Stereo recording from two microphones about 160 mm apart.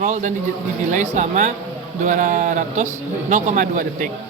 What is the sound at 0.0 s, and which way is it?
Speech, 50° right (ahead or behind).